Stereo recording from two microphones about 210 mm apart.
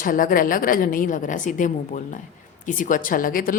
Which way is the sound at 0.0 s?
40° left (ahead or behind).